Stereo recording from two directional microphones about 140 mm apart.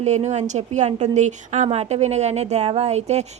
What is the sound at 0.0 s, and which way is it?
A woman's voice, 55° right (ahead or behind).